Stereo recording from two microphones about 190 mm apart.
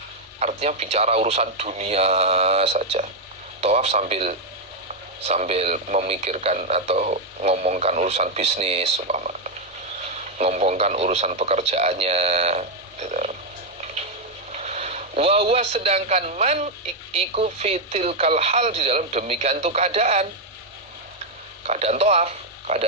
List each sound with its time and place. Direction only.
0.3 s speech: 35° right (ahead or behind)
14.5 s a man's voice: 35° right (ahead or behind)
21.7 s a man's voice: 35° right (ahead or behind)